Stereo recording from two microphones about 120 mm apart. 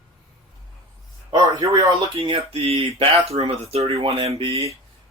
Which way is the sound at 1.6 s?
30° right (ahead or behind).